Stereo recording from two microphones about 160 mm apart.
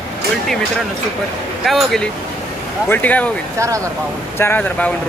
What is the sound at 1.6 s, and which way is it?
Speech, centre (ahead or behind).